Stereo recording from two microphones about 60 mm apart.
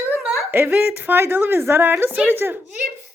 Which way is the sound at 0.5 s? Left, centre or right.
Right.